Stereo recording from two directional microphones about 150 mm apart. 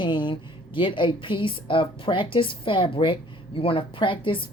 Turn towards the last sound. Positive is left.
turn(degrees=35)  # may be behind; listen again after turning